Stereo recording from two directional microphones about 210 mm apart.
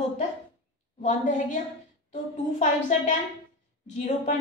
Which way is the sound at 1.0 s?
35° left (ahead or behind).